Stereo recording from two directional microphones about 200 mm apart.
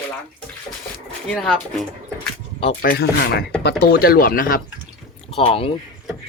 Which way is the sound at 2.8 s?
50° left (ahead or behind).